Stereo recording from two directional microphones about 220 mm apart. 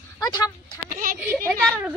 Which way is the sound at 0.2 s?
20° left (ahead or behind).